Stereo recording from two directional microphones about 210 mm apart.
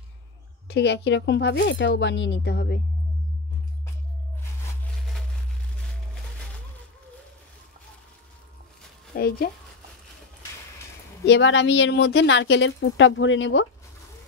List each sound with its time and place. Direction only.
0.7 s speech: 55° left (ahead or behind)
9.1 s speech: 45° left (ahead or behind)
11.2 s speech: 60° left (ahead or behind)